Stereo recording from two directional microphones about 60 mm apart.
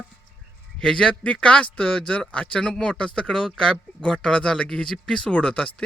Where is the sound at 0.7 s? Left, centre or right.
Centre.